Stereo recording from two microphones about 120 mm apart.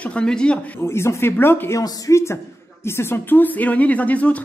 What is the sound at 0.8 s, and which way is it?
A woman's voice, 20° left (ahead or behind).